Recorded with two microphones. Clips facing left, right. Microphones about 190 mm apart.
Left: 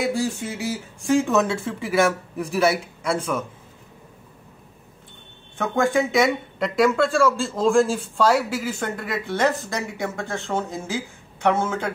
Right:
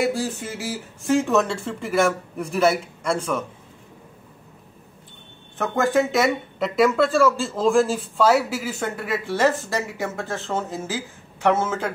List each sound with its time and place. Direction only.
0.0 s speech: 5° right (ahead or behind)
5.6 s speech: centre (ahead or behind)